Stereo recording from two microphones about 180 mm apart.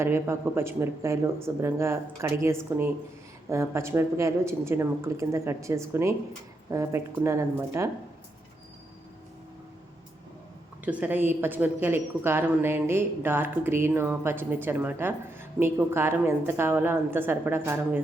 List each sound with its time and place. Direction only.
0.0 s a woman's voice: 15° right (ahead or behind)
10.8 s a woman's voice: 5° right (ahead or behind)